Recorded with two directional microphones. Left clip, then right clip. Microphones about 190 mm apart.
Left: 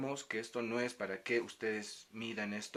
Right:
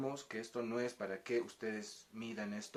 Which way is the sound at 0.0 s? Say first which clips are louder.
Left 3 dB; 35° left (ahead or behind).